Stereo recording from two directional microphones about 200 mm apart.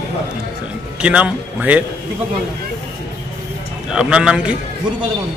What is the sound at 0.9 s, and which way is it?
Speech, 5° right (ahead or behind).